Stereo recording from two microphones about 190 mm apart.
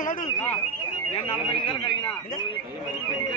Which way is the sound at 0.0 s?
45° left (ahead or behind).